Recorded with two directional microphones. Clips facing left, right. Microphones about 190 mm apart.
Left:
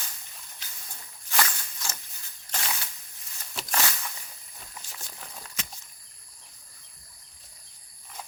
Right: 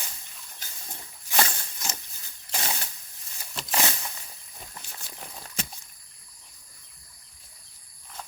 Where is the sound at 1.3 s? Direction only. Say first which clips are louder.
Right 2 dB; 25° right (ahead or behind).